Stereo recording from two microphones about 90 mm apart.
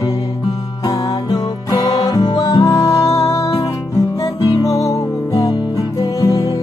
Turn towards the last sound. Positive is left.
turn(degrees=40)  # may be behind; listen again after turning